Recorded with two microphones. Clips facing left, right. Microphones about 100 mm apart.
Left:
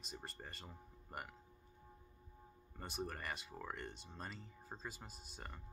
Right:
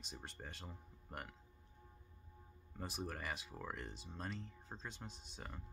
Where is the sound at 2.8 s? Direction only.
Centre (ahead or behind).